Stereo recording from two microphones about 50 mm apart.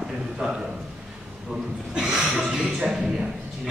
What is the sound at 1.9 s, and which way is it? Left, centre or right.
A man's voice, centre.